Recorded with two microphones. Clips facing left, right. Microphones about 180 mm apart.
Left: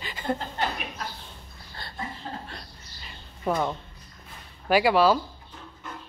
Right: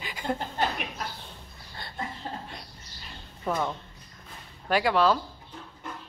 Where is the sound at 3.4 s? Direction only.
15° left (ahead or behind).